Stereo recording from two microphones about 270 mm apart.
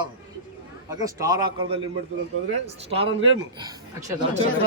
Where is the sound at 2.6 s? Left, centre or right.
Right.